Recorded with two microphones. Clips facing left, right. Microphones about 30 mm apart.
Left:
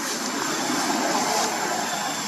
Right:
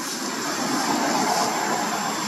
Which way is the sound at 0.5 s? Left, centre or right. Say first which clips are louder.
Right 2 dB; centre.